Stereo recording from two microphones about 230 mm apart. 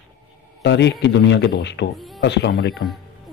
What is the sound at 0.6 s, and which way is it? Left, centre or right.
Speech, left.